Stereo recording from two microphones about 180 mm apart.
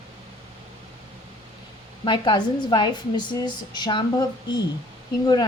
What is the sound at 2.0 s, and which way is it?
A woman's voice, 25° left (ahead or behind).